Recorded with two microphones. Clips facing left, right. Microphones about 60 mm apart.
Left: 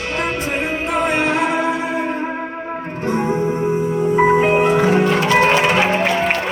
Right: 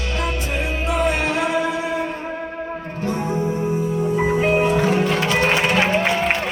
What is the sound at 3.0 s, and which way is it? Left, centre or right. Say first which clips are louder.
Music: left 4 dB; left.